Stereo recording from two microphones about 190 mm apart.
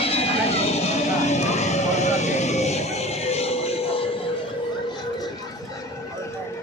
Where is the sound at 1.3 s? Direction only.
35° left (ahead or behind).